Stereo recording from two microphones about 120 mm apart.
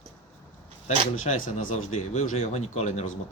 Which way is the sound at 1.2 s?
90° left.